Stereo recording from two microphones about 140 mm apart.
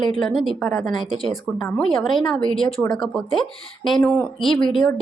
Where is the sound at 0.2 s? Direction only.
Centre (ahead or behind).